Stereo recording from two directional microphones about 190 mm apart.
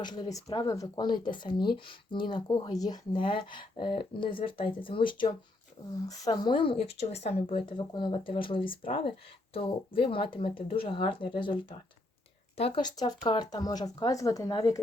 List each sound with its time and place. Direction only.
0.0 s speech: 20° left (ahead or behind)